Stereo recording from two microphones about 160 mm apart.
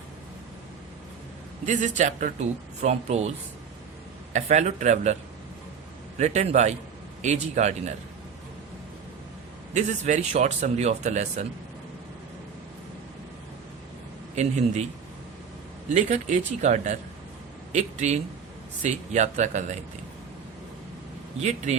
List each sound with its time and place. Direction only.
1.6 s speech: 50° right (ahead or behind)
6.1 s speech: 45° right (ahead or behind)
9.7 s speech: 50° right (ahead or behind)
14.3 s speech: 45° right (ahead or behind)
15.9 s a man's voice: 50° right (ahead or behind)
21.4 s speech: 45° right (ahead or behind)